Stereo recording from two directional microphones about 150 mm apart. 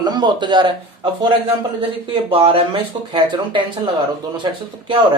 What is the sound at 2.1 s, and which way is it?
Speech, 40° right (ahead or behind).